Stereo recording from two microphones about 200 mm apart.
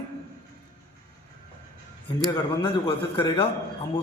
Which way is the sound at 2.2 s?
25° left (ahead or behind).